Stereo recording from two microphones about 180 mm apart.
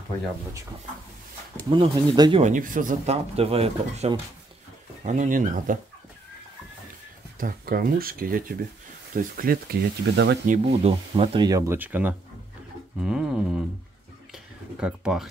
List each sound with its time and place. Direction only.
1.7 s speech: 25° right (ahead or behind)
2.4 s speech: 45° right (ahead or behind)
3.3 s speech: 35° right (ahead or behind)
7.3 s speech: 55° right (ahead or behind)
10.4 s speech: 40° right (ahead or behind); by 12.2 s 10° right (ahead or behind)
13.0 s pigeon: 5° right (ahead or behind)
14.3 s speech: 5° right (ahead or behind)